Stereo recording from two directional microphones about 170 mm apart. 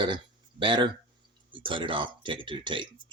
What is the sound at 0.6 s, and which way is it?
Speech, 30° right (ahead or behind).